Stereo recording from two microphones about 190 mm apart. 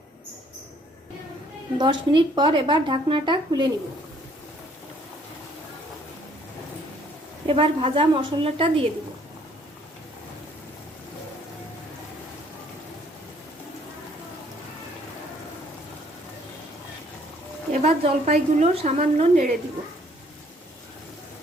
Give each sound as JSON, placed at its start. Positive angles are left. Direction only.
{"t": 1.8, "sound": "a woman's voice", "side_deg": -25}
{"t": 7.4, "sound": "a woman's voice", "side_deg": -30}
{"t": 17.7, "sound": "a woman's voice", "side_deg": -35}